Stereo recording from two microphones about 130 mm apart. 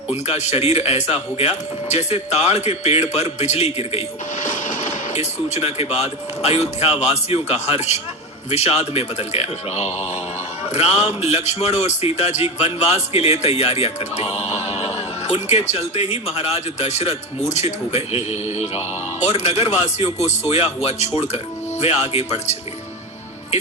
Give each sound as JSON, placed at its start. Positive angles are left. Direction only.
{"t": 0.1, "sound": "a man's voice", "side_deg": 55}
{"t": 4.4, "sound": "a man's voice", "side_deg": 75}